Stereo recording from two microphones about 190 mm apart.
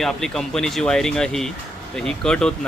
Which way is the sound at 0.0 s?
5° left (ahead or behind).